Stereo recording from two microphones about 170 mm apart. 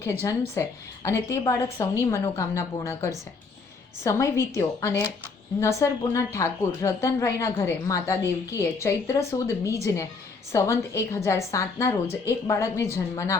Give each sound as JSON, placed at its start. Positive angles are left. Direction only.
{"t": 0.0, "sound": "a woman's voice", "side_deg": 15}